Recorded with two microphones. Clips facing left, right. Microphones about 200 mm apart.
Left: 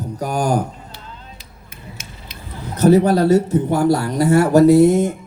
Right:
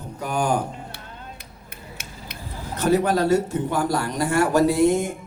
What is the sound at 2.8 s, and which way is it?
Speech, 40° left (ahead or behind).